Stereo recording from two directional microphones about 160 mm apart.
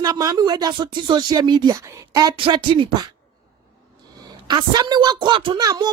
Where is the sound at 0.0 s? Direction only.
20° right (ahead or behind).